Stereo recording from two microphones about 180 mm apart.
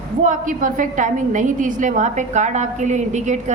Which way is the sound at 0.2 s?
45° right (ahead or behind).